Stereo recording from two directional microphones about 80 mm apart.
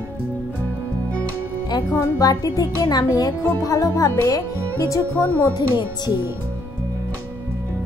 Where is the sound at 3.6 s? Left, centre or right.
Left.